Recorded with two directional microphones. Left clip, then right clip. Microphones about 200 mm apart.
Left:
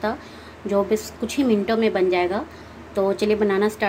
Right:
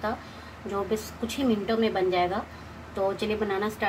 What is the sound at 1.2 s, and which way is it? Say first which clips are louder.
A woman's voice: left 6 dB; 45° left (ahead or behind).